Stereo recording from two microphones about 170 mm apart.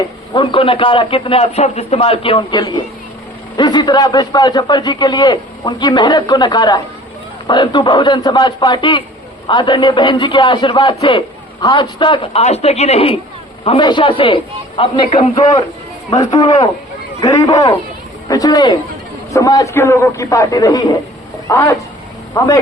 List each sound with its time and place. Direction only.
0.3 s a man's voice: 30° left (ahead or behind)